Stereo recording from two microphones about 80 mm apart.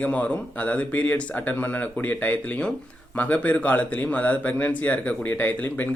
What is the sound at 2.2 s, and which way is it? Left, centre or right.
A man's voice, centre.